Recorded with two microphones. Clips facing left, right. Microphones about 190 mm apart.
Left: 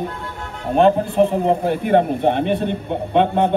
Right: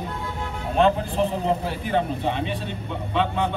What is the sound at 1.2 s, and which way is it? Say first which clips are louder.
A man's voice: left 7 dB; 55° left (ahead or behind).